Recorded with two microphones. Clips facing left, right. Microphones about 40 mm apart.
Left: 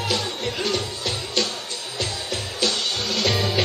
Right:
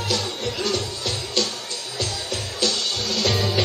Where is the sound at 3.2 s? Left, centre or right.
Centre.